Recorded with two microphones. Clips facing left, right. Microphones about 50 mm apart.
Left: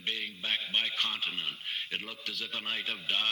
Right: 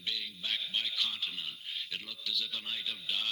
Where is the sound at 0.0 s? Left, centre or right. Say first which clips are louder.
Left 3 dB; left.